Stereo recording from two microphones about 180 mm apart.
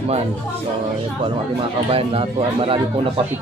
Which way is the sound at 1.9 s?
30° right (ahead or behind).